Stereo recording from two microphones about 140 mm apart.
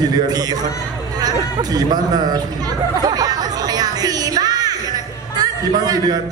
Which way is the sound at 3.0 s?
25° right (ahead or behind).